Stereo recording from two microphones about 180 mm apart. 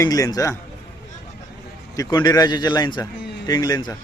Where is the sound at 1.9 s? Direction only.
20° left (ahead or behind).